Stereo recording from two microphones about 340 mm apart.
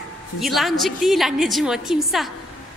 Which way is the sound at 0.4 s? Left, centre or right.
Centre.